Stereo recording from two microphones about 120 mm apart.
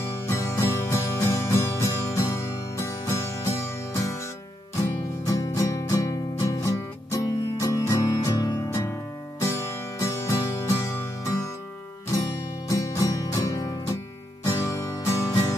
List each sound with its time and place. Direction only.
0.3 s music: 25° left (ahead or behind)
5.2 s music: 30° left (ahead or behind)
12.6 s music: 30° left (ahead or behind)